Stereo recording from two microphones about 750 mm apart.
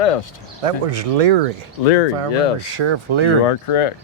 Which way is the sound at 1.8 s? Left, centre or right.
Left.